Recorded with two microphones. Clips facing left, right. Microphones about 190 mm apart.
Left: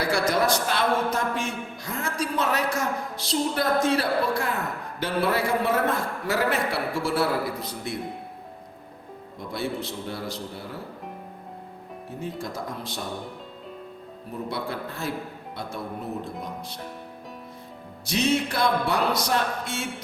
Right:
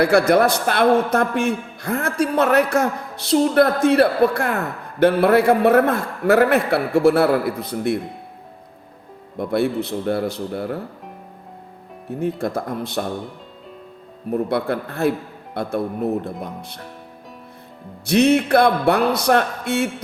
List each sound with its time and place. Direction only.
0.0 s a woman's voice: 60° right (ahead or behind)
9.4 s a woman's voice: 60° right (ahead or behind)
12.2 s a woman's voice: 60° right (ahead or behind)
14.3 s a woman's voice: 60° right (ahead or behind)
18.0 s a woman's voice: 60° right (ahead or behind)